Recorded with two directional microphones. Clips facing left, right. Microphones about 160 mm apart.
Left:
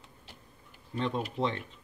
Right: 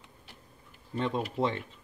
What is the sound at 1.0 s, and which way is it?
Speech, 10° right (ahead or behind).